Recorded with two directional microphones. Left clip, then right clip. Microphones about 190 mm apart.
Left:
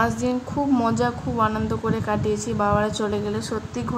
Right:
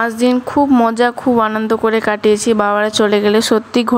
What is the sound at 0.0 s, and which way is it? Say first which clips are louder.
A woman's voice: right 8 dB; 20° right (ahead or behind).